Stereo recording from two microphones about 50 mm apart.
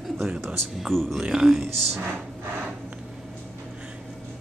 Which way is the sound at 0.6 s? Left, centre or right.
Centre.